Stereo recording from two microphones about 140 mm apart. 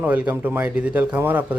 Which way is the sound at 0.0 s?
10° right (ahead or behind).